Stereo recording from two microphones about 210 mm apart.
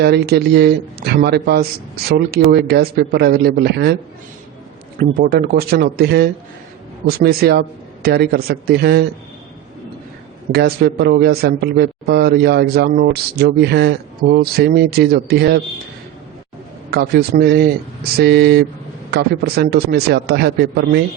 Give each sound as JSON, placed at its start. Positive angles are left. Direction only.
{"t": 0.0, "sound": "speech", "side_deg": -50}
{"t": 4.9, "sound": "speech", "side_deg": -45}
{"t": 10.5, "sound": "speech", "side_deg": -50}
{"t": 16.9, "sound": "speech", "side_deg": -50}